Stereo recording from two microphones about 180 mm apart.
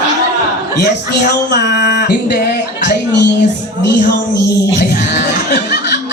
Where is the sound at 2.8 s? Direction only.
75° left (ahead or behind).